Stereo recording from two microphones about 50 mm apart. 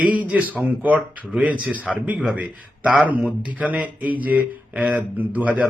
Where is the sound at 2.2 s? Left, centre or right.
Centre.